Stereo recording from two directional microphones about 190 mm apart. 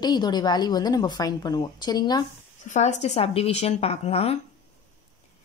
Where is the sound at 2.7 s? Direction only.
35° left (ahead or behind).